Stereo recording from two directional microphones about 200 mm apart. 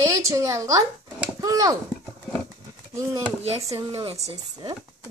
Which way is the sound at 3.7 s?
20° right (ahead or behind).